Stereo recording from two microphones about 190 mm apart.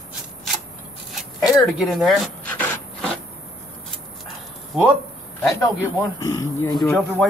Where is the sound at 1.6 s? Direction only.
Centre (ahead or behind).